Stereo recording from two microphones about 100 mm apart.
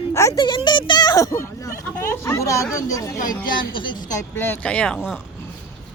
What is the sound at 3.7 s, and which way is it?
Speech, 55° left (ahead or behind).